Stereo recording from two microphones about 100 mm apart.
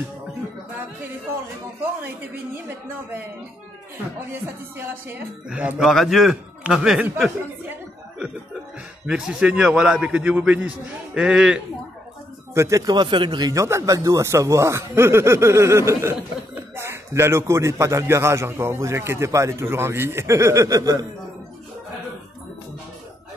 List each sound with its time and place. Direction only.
4.7 s a man's voice: 20° right (ahead or behind)
5.8 s a man's voice: centre (ahead or behind)
9.0 s a man's voice: 5° right (ahead or behind)
12.5 s speech: 30° right (ahead or behind)
12.8 s speech: 50° right (ahead or behind)
13.5 s speech: 30° right (ahead or behind)